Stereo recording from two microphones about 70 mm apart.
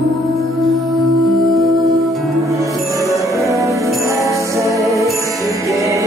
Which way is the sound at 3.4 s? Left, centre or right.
Right.